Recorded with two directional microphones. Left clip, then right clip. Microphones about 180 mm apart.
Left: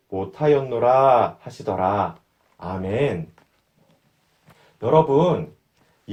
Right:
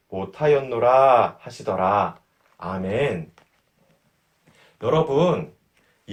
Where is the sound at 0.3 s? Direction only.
50° left (ahead or behind).